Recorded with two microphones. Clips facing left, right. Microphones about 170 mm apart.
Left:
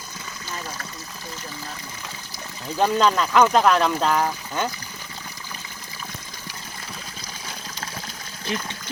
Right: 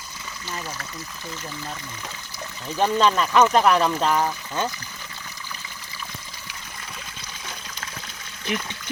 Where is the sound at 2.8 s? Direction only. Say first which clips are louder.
Left 1 dB; 10° left (ahead or behind).